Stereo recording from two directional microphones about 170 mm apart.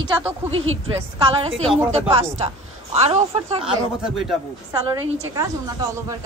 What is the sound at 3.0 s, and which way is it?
Speech, 40° right (ahead or behind).